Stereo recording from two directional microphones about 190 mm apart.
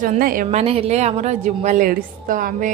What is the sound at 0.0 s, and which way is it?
Speech, 45° right (ahead or behind).